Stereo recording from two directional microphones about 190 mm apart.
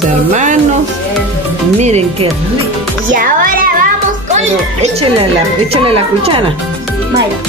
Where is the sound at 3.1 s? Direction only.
45° right (ahead or behind).